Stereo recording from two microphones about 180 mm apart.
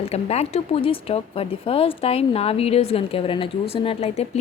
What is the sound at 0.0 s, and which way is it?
A woman's voice, 35° left (ahead or behind).